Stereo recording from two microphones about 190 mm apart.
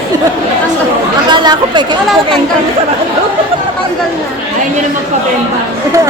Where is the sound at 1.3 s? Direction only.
25° right (ahead or behind).